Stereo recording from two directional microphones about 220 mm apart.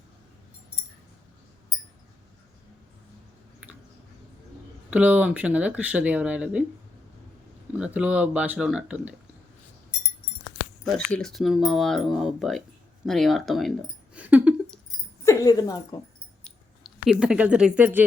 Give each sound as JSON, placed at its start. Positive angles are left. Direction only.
{"t": 4.9, "sound": "speech", "side_deg": -5}
{"t": 7.8, "sound": "speech", "side_deg": -5}
{"t": 10.9, "sound": "speech", "side_deg": 0}
{"t": 14.2, "sound": "a sound", "side_deg": -5}
{"t": 15.2, "sound": "speech", "side_deg": 15}
{"t": 17.1, "sound": "speech", "side_deg": -5}